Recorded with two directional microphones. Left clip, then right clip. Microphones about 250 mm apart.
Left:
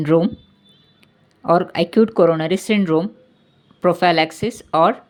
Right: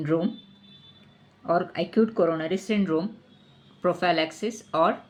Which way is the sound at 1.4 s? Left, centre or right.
Left.